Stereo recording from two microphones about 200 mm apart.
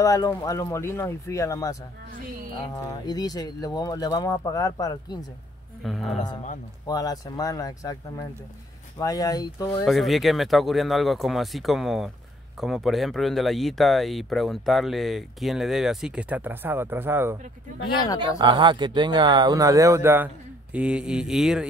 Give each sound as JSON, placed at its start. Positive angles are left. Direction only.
{"t": 0.0, "sound": "speech", "side_deg": 15}
{"t": 5.9, "sound": "speech", "side_deg": 0}
{"t": 6.9, "sound": "speech", "side_deg": 20}
{"t": 9.8, "sound": "speech", "side_deg": 0}
{"t": 18.0, "sound": "speech", "side_deg": 20}
{"t": 18.4, "sound": "speech", "side_deg": -25}